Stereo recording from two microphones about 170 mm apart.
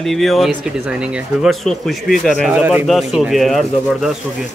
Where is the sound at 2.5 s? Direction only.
10° right (ahead or behind).